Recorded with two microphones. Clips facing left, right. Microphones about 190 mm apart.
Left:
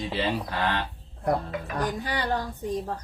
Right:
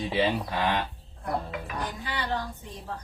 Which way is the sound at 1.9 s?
45° left (ahead or behind).